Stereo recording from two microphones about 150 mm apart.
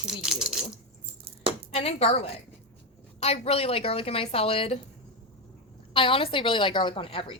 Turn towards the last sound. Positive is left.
turn(degrees=35)  # may be behind; listen again after turning